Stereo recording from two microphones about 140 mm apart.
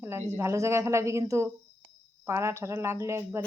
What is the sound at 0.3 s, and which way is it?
Speech, 20° right (ahead or behind).